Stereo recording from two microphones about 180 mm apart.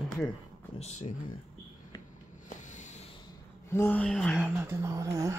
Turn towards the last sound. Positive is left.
turn(degrees=-15)  # may be behind; listen again after turning